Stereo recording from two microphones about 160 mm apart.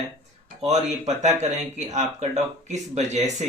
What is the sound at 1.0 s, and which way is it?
Speech, 45° right (ahead or behind).